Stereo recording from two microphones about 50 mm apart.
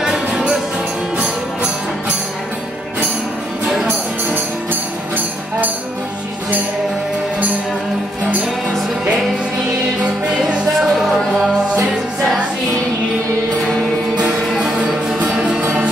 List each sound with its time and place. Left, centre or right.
0.0 s music: centre
10.5 s music: centre
11.0 s music: centre
14.5 s music: centre
14.8 s music: right